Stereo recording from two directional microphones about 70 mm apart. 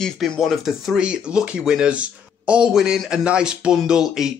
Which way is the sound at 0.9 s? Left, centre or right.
Centre.